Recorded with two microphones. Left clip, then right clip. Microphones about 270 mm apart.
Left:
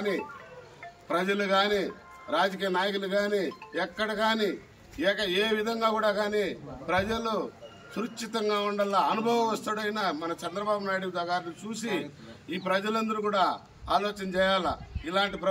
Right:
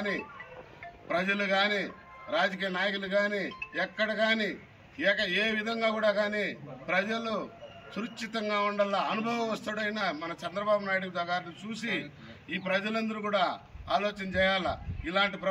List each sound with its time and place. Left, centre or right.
1.0 s speech: centre